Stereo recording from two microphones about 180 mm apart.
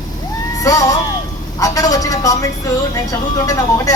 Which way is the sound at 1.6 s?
20° left (ahead or behind).